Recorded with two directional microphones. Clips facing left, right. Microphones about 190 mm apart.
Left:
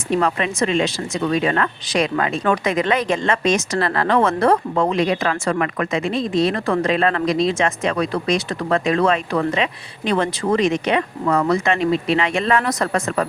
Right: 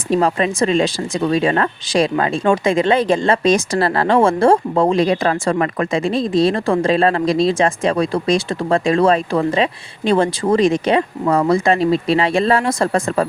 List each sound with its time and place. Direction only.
0.1 s speech: 35° right (ahead or behind)